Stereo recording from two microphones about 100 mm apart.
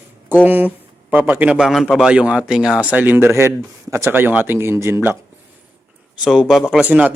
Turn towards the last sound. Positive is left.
turn(degrees=-15)  # may be behind; listen again after turning